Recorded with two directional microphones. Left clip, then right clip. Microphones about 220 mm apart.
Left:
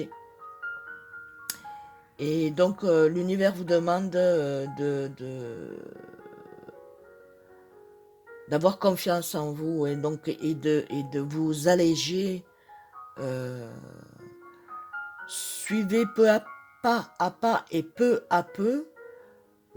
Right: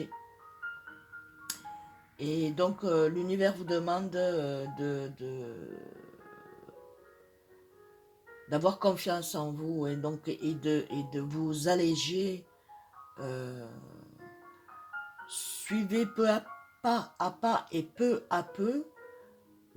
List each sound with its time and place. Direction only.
2.1 s speech: 50° left (ahead or behind)
8.4 s speech: 50° left (ahead or behind)
14.8 s music: 50° left (ahead or behind)
16.8 s speech: 50° left (ahead or behind)